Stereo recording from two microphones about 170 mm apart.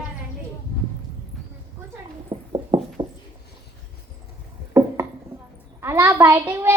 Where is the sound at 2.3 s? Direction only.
30° right (ahead or behind).